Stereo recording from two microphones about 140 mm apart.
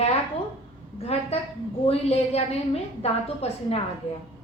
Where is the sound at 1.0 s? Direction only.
45° left (ahead or behind).